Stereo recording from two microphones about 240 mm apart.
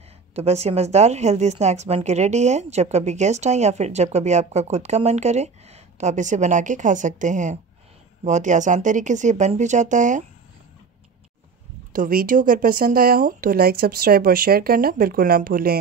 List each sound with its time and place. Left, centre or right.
0.3 s speech: right
11.9 s speech: right